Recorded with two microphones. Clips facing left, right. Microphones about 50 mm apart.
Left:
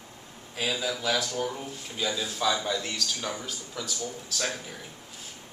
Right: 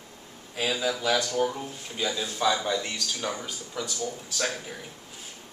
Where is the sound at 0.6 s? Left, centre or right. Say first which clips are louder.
Right 2 dB; centre.